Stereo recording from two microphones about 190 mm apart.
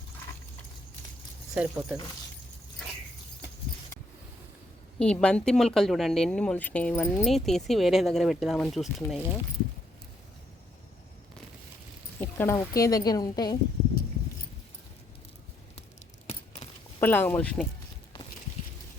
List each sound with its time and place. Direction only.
1.5 s speech: 5° right (ahead or behind)
4.9 s speech: 5° left (ahead or behind)
12.2 s speech: 15° left (ahead or behind)
17.0 s speech: 10° left (ahead or behind)